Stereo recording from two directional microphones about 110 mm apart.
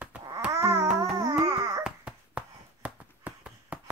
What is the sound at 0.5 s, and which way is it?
Babbling, 25° right (ahead or behind).